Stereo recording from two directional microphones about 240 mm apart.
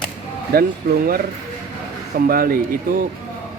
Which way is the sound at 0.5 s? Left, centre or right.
Right.